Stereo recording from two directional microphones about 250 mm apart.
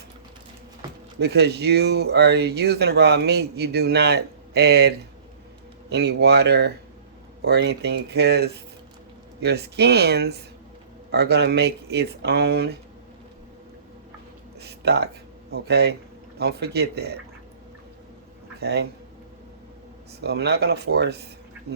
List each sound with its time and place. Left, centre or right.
1.2 s speech: right
14.6 s a sound: right
15.5 s speech: right
18.6 s speech: right
20.2 s speech: right